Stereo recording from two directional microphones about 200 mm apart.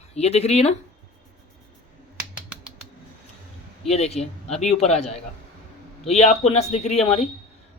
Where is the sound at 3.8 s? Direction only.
30° left (ahead or behind).